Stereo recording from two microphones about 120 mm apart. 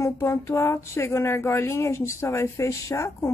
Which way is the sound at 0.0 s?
25° left (ahead or behind).